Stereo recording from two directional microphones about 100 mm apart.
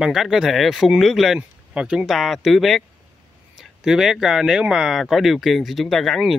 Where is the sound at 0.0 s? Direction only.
5° right (ahead or behind).